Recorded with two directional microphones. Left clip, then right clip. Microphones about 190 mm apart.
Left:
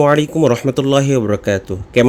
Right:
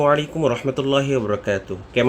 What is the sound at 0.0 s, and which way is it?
A man's voice, 45° left (ahead or behind).